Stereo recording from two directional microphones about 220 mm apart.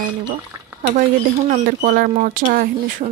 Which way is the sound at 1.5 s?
40° right (ahead or behind).